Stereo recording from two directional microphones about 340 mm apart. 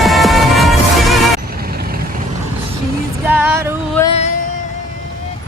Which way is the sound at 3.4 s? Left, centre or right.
Centre.